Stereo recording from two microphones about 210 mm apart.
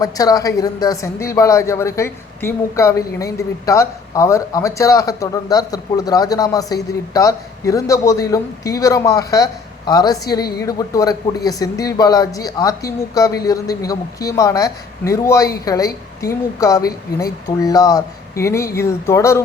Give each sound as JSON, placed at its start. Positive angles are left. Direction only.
{"t": 0.0, "sound": "a woman's voice", "side_deg": 15}